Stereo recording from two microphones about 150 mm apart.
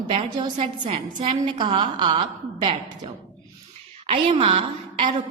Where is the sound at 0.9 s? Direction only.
45° right (ahead or behind).